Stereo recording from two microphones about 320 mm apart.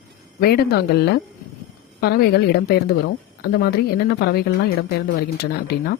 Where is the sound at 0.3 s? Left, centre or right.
Left.